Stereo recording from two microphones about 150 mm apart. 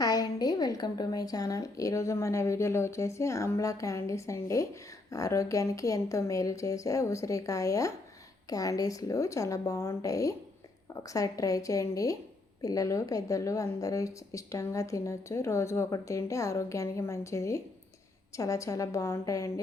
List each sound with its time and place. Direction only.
0.0 s a woman's voice: 25° left (ahead or behind)